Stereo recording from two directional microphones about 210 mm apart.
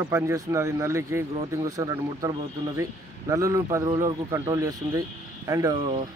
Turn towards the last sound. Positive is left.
turn(degrees=-20)  # may be behind; listen again after turning